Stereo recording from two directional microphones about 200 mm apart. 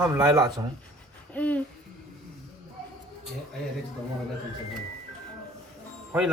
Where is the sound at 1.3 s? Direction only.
5° left (ahead or behind).